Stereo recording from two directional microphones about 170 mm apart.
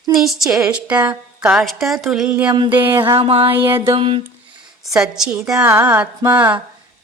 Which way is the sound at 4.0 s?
30° right (ahead or behind).